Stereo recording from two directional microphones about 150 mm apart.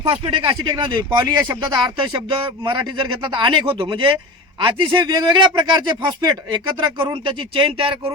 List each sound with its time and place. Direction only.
0.0 s speech: 35° right (ahead or behind)